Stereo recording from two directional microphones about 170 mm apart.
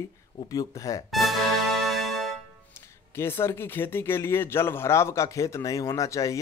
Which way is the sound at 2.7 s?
15° left (ahead or behind).